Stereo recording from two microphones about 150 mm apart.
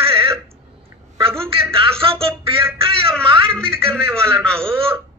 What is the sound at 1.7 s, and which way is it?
Music, 40° right (ahead or behind).